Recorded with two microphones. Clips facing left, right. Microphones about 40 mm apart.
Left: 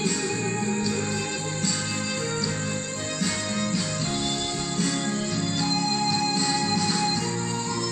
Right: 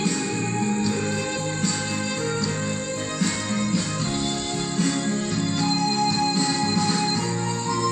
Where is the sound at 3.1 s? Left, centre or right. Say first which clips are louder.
Right 2 dB; centre.